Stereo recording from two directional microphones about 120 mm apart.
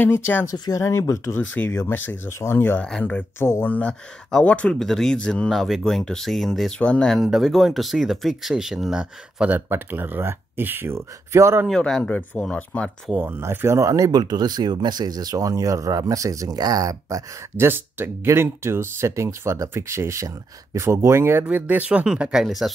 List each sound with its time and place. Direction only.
0.0 s speech: 15° left (ahead or behind)
0.5 s speech: 25° left (ahead or behind); by 11.6 s 25° right (ahead or behind)
11.6 s speech: 5° left (ahead or behind)
13.1 s speech: 15° right (ahead or behind)